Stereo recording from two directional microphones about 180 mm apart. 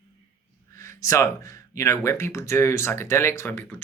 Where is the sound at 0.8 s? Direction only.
15° left (ahead or behind).